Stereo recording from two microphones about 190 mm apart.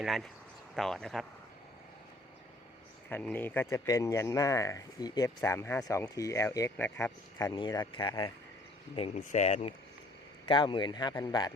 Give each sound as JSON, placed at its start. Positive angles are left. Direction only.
{"t": 0.0, "sound": "speech", "side_deg": 0}
{"t": 3.1, "sound": "speech", "side_deg": 10}
{"t": 9.0, "sound": "speech", "side_deg": 35}
{"t": 10.5, "sound": "speech", "side_deg": 25}